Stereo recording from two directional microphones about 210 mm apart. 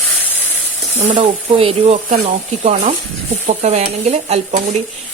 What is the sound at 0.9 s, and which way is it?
Speech, 30° right (ahead or behind).